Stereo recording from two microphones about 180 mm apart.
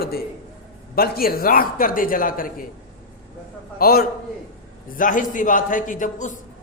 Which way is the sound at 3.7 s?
55° left (ahead or behind).